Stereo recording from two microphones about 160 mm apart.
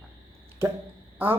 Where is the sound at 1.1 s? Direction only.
15° right (ahead or behind).